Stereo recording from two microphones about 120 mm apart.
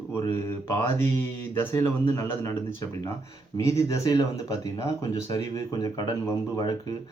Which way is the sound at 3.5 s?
30° left (ahead or behind).